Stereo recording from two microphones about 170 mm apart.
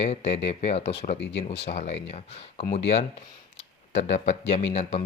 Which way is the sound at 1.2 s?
90° left.